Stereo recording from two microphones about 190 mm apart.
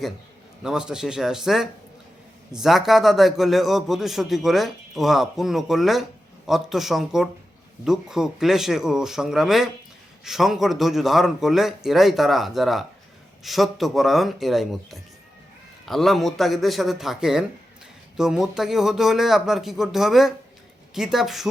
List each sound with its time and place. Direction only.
0.6 s a man's voice: 5° right (ahead or behind)